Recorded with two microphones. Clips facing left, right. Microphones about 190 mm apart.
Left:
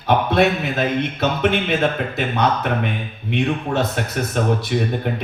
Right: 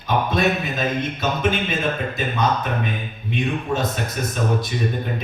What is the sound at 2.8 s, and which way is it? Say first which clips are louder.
A man's voice: left 2 dB; 65° left (ahead or behind).